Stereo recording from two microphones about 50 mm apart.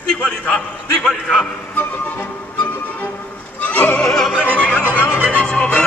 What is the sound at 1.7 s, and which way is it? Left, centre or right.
Music, left.